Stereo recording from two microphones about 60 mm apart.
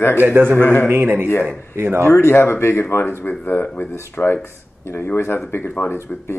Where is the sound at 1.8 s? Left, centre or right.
Right.